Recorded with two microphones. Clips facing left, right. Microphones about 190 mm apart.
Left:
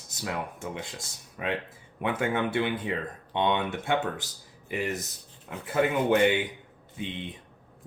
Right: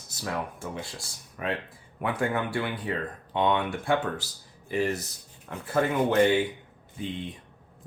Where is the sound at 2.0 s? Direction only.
20° left (ahead or behind).